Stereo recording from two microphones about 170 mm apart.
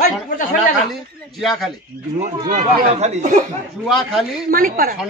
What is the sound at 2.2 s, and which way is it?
Speech, 45° right (ahead or behind).